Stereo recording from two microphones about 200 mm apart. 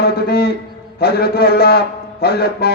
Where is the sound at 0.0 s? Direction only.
50° left (ahead or behind).